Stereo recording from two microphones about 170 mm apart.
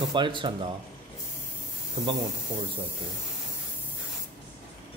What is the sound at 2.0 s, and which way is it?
Speech, 45° right (ahead or behind).